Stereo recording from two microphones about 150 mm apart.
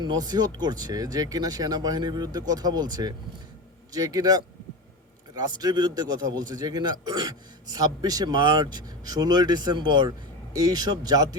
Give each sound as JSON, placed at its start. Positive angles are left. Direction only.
{"t": 0.0, "sound": "a man's voice", "side_deg": -25}